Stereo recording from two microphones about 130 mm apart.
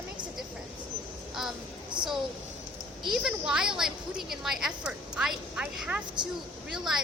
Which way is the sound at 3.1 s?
5° right (ahead or behind).